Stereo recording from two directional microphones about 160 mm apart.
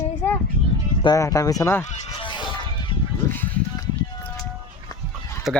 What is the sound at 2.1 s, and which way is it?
Honk, 30° left (ahead or behind).